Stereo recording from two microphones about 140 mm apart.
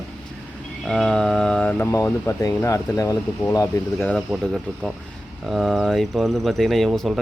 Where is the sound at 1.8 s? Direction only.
25° left (ahead or behind).